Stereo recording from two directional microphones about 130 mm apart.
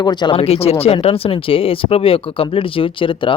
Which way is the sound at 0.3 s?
50° left (ahead or behind).